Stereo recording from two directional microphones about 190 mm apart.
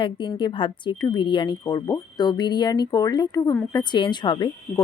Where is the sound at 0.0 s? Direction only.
25° left (ahead or behind).